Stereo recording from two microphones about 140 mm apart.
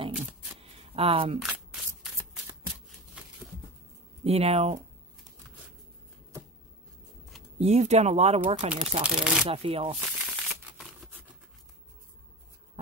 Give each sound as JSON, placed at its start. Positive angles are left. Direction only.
{"t": 0.6, "sound": "single-lens reflex camera", "side_deg": -40}
{"t": 1.4, "sound": "shuffling cards", "side_deg": -5}
{"t": 4.2, "sound": "speech", "side_deg": -45}
{"t": 7.5, "sound": "speech", "side_deg": -50}
{"t": 8.6, "sound": "speech", "side_deg": -5}
{"t": 9.5, "sound": "speech", "side_deg": -40}
{"t": 9.9, "sound": "crumpling", "side_deg": -5}